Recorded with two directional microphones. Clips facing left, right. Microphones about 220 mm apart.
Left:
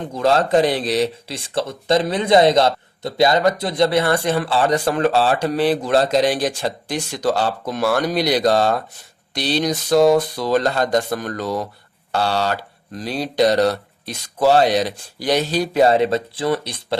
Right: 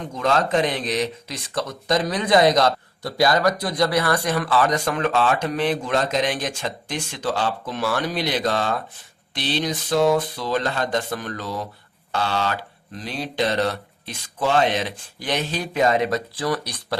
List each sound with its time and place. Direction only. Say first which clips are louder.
0.1 s speech: left 5 dB; 35° left (ahead or behind)